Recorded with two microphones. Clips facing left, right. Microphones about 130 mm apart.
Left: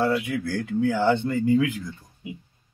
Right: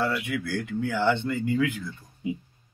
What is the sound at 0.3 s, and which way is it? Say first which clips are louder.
A man's voice: left 3 dB; 25° left (ahead or behind).